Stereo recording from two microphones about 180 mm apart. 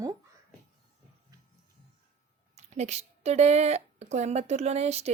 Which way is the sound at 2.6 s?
40° right (ahead or behind).